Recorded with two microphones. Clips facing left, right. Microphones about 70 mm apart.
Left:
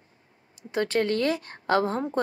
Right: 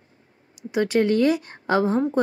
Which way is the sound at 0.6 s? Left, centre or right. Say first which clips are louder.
Right 4 dB; centre.